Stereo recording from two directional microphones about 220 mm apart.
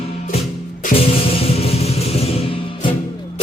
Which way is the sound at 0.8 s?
25° left (ahead or behind).